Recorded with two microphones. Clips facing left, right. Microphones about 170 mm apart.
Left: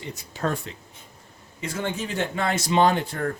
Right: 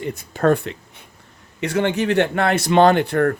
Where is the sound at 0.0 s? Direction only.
55° right (ahead or behind).